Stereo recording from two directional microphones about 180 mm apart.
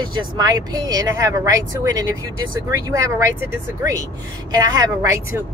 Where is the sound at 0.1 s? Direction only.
20° right (ahead or behind).